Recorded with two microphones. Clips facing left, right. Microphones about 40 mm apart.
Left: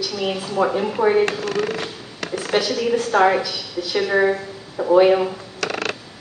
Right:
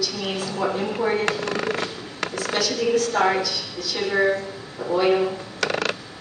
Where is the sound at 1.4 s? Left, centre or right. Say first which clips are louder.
Left 3 dB; centre.